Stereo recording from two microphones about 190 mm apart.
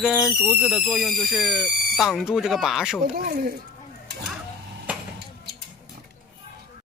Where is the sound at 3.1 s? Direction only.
50° right (ahead or behind).